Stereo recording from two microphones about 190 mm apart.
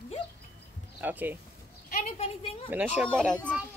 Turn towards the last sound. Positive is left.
turn(degrees=5)  # may be behind; listen again after turning